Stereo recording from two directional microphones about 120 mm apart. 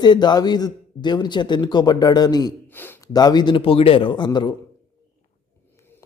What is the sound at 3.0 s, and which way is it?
A man's voice, 35° left (ahead or behind).